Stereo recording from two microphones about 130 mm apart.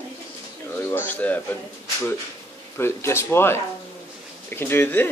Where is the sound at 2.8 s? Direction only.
20° left (ahead or behind).